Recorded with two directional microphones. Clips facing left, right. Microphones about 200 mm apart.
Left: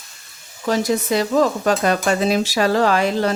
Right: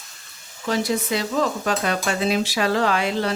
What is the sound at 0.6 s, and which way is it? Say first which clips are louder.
Speech: left 4 dB; 45° left (ahead or behind).